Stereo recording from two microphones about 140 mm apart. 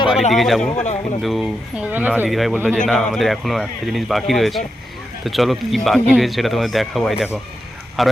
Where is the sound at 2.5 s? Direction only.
15° right (ahead or behind).